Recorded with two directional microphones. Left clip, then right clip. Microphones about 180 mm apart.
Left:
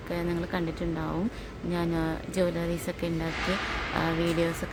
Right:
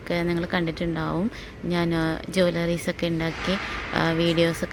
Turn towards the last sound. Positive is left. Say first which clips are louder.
# right 5 dB
turn(degrees=-25)  # may be behind; listen again after turning